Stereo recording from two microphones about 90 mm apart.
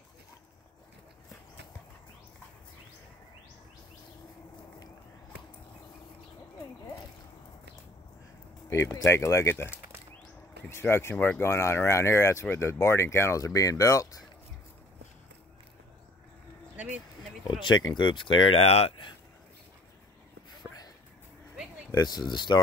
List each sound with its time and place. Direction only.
8.9 s speech: 30° left (ahead or behind)
10.7 s speech: 30° left (ahead or behind)
16.7 s vehicle: 20° right (ahead or behind)
17.5 s speech: 60° left (ahead or behind)
21.9 s speech: 50° left (ahead or behind)